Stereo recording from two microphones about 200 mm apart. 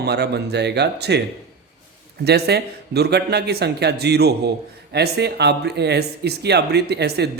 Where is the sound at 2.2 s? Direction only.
55° right (ahead or behind).